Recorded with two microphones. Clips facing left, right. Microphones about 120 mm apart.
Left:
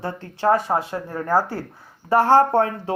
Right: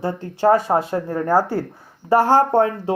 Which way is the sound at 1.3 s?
20° right (ahead or behind).